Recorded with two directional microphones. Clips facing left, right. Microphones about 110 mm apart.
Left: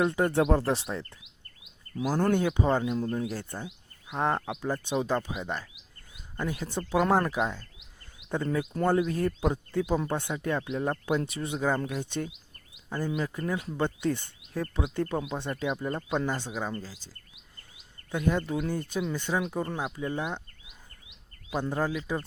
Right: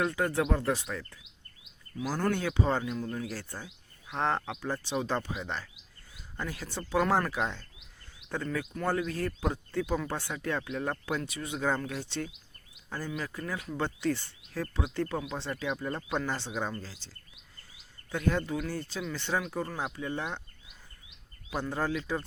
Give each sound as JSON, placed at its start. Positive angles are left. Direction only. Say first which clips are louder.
{"t": 0.0, "sound": "speech", "louder": "left 4 dB", "side_deg": 25}
{"t": 2.1, "sound": "speech", "louder": "left 4 dB", "side_deg": 25}
{"t": 2.9, "sound": "speech", "louder": "left 5 dB", "side_deg": 25}
{"t": 7.3, "sound": "speech", "louder": "left 3 dB", "side_deg": 10}
{"t": 8.4, "sound": "speech", "louder": "left 5 dB", "side_deg": 30}
{"t": 11.5, "sound": "speech", "louder": "left 2 dB", "side_deg": 15}
{"t": 13.7, "sound": "speech", "louder": "even", "side_deg": 15}
{"t": 18.1, "sound": "speech", "louder": "left 2 dB", "side_deg": 15}
{"t": 19.6, "sound": "speech", "louder": "left 3 dB", "side_deg": 5}
{"t": 21.5, "sound": "speech", "louder": "left 2 dB", "side_deg": 15}